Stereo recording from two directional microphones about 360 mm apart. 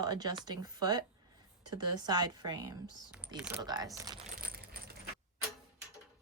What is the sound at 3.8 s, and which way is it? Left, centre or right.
Coin, centre.